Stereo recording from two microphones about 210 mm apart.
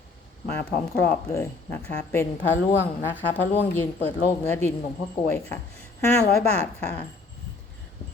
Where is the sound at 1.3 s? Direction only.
15° left (ahead or behind).